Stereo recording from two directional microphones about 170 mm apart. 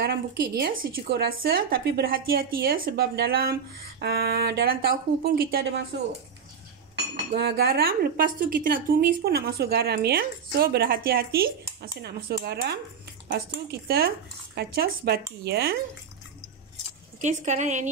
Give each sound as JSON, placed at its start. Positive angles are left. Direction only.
{"t": 0.0, "sound": "a woman's voice", "side_deg": -65}
{"t": 7.3, "sound": "a woman's voice", "side_deg": -70}
{"t": 17.2, "sound": "a woman's voice", "side_deg": -45}